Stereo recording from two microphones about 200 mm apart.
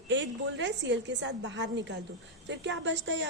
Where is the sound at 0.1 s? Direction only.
65° right (ahead or behind).